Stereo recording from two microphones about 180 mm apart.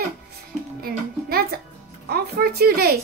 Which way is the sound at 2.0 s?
60° right (ahead or behind).